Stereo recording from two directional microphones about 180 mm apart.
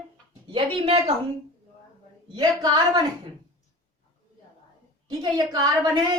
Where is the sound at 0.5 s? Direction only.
30° right (ahead or behind).